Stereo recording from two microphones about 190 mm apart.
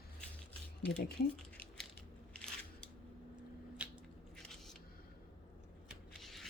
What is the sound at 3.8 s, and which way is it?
Squish, 5° right (ahead or behind).